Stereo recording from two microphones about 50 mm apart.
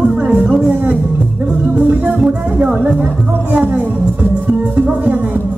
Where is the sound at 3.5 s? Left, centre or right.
Right.